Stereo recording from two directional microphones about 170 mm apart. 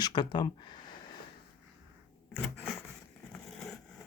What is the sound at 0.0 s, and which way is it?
Speech, 25° left (ahead or behind).